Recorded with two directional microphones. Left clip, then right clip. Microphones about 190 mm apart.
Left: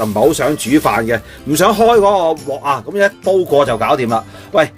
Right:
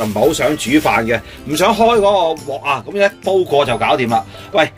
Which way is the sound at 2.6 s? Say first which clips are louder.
Left 1 dB; 35° left (ahead or behind).